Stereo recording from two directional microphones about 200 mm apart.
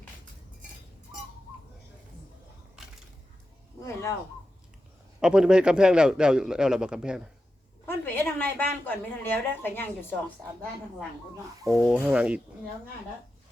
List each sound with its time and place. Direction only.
5.2 s a man's voice: 5° right (ahead or behind)
7.9 s a woman's voice: 10° left (ahead or behind)
11.8 s a man's voice: 5° right (ahead or behind)